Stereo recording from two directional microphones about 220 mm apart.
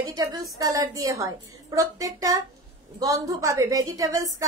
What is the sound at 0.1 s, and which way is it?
A woman's voice, 15° right (ahead or behind).